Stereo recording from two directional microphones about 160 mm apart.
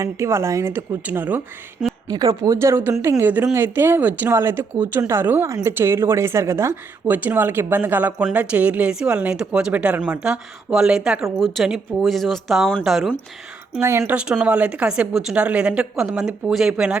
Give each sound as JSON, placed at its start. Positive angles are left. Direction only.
{"t": 0.0, "sound": "speech", "side_deg": -15}
{"t": 2.0, "sound": "a woman's voice", "side_deg": -25}
{"t": 13.7, "sound": "speech", "side_deg": -15}
{"t": 14.0, "sound": "a woman's voice", "side_deg": -5}